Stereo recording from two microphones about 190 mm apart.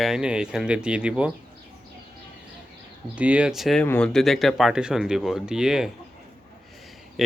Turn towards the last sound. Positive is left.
turn(degrees=0)  # may be behind; listen again after turning